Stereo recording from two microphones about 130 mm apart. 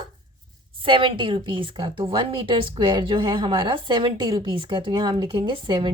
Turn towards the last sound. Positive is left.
turn(degrees=-40)  # may be behind; listen again after turning